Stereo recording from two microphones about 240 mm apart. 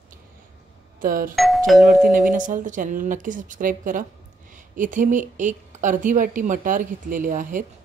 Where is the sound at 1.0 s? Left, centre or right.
Right.